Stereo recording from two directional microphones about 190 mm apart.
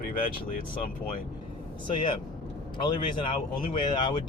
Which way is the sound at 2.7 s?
25° left (ahead or behind).